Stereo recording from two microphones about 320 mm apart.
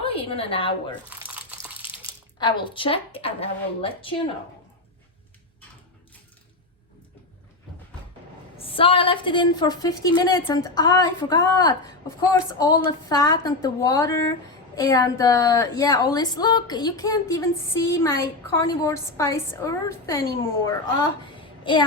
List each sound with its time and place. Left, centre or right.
0.0 s a woman's voice: centre
1.3 s a sound: centre
1.9 s speech: centre
8.5 s a woman's voice: centre